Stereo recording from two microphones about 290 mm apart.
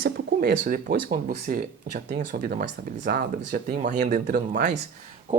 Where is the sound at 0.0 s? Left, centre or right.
Right.